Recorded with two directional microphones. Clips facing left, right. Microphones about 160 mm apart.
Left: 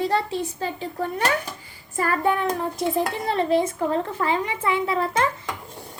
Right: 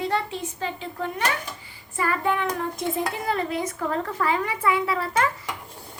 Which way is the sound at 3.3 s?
30° left (ahead or behind).